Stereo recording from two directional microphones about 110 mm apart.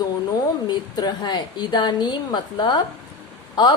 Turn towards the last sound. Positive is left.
turn(degrees=40)  # may be behind; listen again after turning